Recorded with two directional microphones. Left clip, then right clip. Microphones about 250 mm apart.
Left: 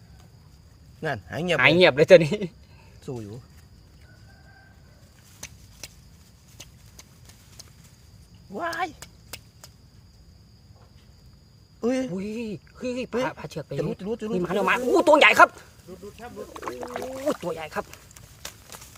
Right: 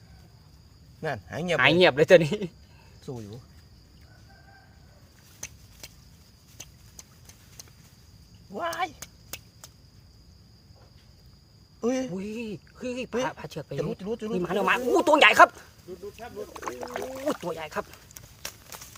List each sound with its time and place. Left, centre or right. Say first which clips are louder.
1.0 s speech: left 3 dB; centre
1.5 s speech: left 2 dB; centre
3.0 s speech: left 4 dB; left
6.6 s a sound: even; centre
8.5 s speech: left 1 dB; centre
9.0 s a sound: even; centre
11.8 s speech: left 2 dB; centre
14.3 s speech: left 2 dB; centre
18.4 s a sound: right 1 dB; centre